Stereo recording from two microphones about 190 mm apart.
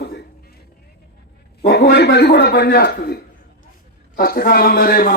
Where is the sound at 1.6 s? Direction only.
60° left (ahead or behind).